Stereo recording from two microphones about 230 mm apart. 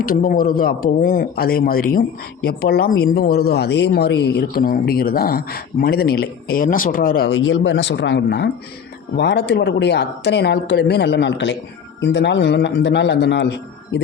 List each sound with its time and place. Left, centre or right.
0.0 s a man's voice: left
7.3 s speech: left